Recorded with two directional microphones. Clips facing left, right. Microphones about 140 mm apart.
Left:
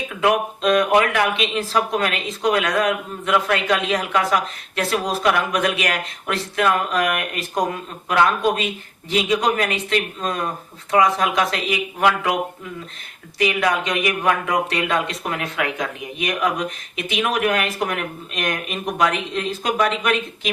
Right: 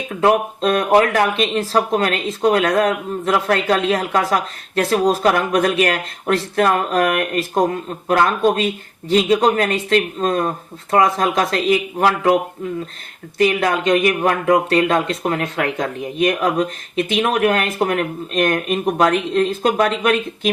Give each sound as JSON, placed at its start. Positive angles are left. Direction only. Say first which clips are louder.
{"t": 0.1, "sound": "speech", "louder": "right 4 dB", "side_deg": -35}
{"t": 13.4, "sound": "speech", "louder": "right 4 dB", "side_deg": -40}